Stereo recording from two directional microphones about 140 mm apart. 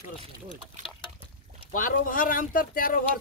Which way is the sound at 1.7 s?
80° left.